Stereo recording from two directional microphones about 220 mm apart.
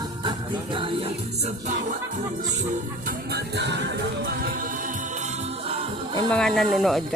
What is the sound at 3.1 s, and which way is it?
Music, 50° right (ahead or behind).